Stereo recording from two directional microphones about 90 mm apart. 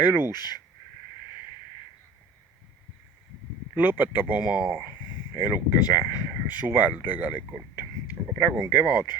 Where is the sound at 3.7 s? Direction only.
15° right (ahead or behind).